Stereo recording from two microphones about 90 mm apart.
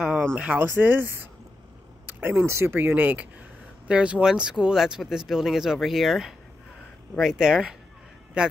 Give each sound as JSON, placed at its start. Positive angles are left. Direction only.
{"t": 0.4, "sound": "speech", "side_deg": -15}
{"t": 2.0, "sound": "a sound", "side_deg": -20}
{"t": 2.4, "sound": "a man's voice", "side_deg": -30}